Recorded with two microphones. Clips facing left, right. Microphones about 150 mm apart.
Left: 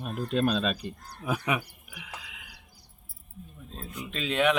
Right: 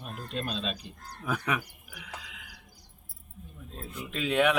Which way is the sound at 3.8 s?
10° right (ahead or behind).